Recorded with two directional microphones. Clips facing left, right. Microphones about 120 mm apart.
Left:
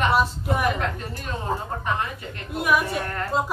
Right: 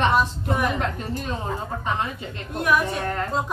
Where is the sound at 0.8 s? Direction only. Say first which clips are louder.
Right 2 dB; 20° right (ahead or behind).